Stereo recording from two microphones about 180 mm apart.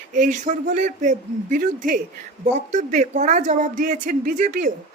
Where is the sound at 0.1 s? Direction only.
45° right (ahead or behind).